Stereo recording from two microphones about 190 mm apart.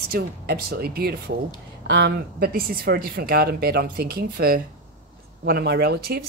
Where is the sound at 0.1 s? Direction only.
55° right (ahead or behind).